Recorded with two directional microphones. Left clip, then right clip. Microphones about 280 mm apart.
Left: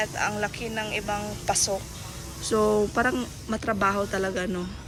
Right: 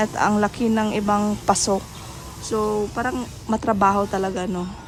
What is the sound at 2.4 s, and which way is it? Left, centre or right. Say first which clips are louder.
Speech: even; centre.